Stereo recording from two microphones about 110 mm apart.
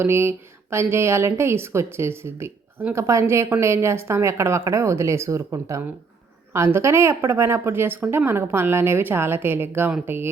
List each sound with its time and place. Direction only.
0.0 s a woman's voice: 20° right (ahead or behind)